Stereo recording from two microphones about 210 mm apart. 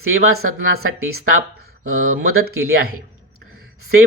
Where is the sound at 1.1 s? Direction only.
50° right (ahead or behind).